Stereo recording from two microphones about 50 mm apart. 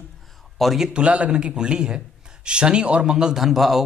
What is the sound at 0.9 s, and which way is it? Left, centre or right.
A man's voice, right.